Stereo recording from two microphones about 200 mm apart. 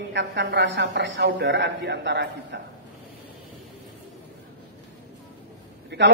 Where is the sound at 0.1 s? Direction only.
60° right (ahead or behind).